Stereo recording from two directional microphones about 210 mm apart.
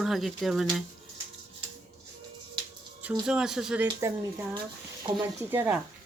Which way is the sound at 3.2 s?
5° right (ahead or behind).